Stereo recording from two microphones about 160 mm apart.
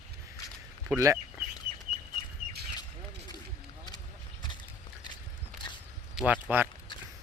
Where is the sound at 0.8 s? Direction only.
15° right (ahead or behind).